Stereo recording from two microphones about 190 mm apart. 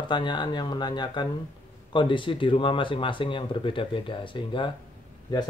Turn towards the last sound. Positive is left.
turn(degrees=20)  # may be behind; listen again after turning